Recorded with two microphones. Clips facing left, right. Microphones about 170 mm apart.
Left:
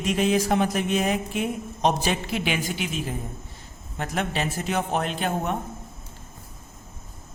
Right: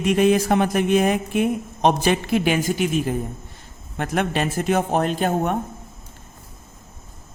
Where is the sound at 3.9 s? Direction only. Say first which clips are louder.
Right 5 dB; 60° right (ahead or behind).